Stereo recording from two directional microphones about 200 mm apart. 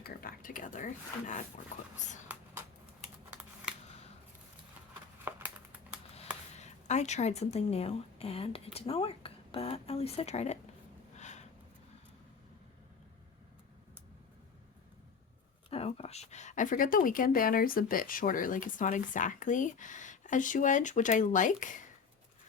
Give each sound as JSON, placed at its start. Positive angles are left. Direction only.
{"t": 0.0, "sound": "a woman's voice", "side_deg": 45}
{"t": 6.6, "sound": "a woman's voice", "side_deg": 35}
{"t": 11.2, "sound": "a sound", "side_deg": 35}
{"t": 15.7, "sound": "a woman's voice", "side_deg": 30}